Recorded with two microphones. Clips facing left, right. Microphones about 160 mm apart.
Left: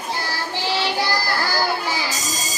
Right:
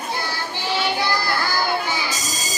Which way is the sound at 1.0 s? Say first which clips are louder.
Even; 35° left (ahead or behind).